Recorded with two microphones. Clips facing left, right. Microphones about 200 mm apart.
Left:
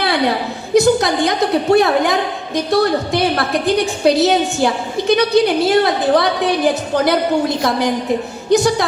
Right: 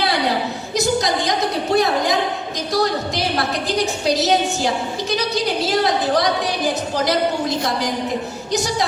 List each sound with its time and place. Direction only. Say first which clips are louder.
0.7 s a sound: left 8 dB; 60° left (ahead or behind)
1.7 s a woman's voice: left 3 dB; 60° left (ahead or behind)
8.4 s music: left 10 dB; 55° left (ahead or behind)